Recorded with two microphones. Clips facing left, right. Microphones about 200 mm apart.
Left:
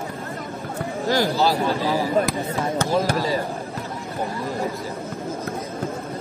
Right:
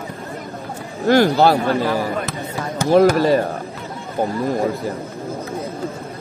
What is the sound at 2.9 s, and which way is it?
Speech, 60° right (ahead or behind).